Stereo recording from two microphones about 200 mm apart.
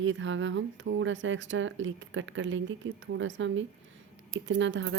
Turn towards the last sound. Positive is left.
turn(degrees=-65)  # may be behind; listen again after turning